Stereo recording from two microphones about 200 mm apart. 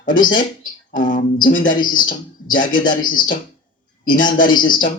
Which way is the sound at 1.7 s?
45° left (ahead or behind).